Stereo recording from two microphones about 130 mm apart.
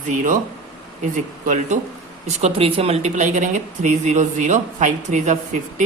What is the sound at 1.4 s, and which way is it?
Speech, 75° right (ahead or behind).